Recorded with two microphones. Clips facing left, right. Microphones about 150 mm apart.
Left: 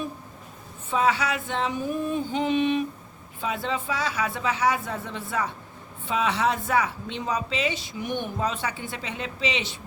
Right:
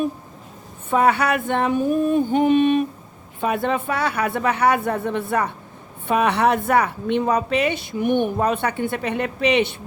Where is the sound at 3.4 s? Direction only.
55° right (ahead or behind).